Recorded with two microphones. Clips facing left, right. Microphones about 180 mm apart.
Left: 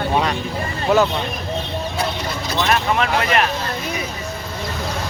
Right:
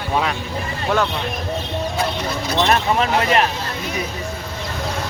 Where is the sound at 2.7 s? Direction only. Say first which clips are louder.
Even; 30° right (ahead or behind).